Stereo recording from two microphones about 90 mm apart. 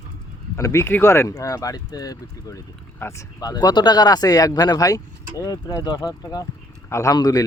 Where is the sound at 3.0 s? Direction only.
30° left (ahead or behind).